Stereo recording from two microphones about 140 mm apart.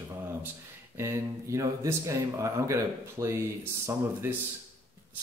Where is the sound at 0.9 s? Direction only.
20° right (ahead or behind).